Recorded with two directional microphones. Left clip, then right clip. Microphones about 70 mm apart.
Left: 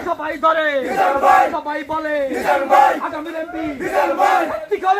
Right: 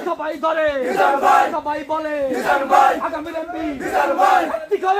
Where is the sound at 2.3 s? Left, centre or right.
Centre.